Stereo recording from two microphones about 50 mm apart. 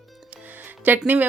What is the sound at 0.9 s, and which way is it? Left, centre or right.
Speech, right.